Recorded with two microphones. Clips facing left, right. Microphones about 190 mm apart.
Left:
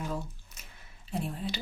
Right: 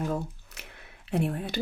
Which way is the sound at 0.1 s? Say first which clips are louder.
Right 5 dB; 65° right (ahead or behind).